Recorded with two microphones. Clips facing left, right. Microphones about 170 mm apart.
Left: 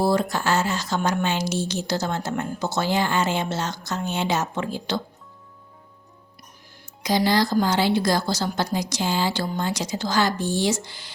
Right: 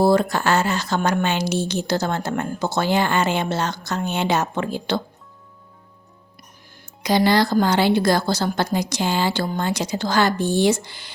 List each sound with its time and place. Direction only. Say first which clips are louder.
0.0 s a woman's voice: right 4 dB; 60° right (ahead or behind)
7.0 s a woman's voice: right 3 dB; 60° right (ahead or behind)